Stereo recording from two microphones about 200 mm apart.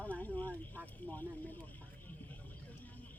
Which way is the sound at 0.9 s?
10° left (ahead or behind).